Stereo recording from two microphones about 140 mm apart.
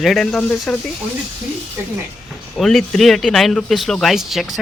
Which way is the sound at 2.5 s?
Centre (ahead or behind).